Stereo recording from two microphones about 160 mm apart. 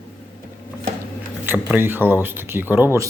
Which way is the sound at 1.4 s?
10° right (ahead or behind).